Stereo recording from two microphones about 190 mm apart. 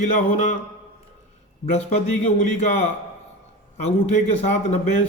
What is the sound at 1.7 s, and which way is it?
Speech, 35° left (ahead or behind).